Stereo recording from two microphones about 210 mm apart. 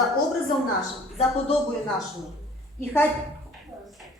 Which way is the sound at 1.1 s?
30° left (ahead or behind).